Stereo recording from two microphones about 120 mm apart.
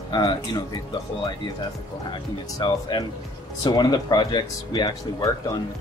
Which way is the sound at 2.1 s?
40° left (ahead or behind).